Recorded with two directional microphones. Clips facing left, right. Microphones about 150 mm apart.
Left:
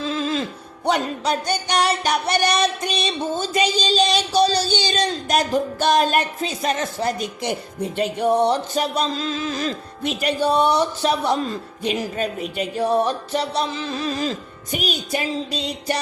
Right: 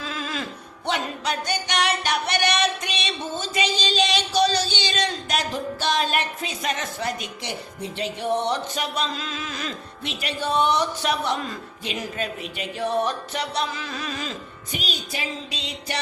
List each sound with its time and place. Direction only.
0.0 s music: 25° left (ahead or behind)
0.9 s speech: 40° left (ahead or behind)
10.0 s speech: 45° left (ahead or behind)
11.8 s speech: 45° left (ahead or behind)
14.8 s music: 50° left (ahead or behind)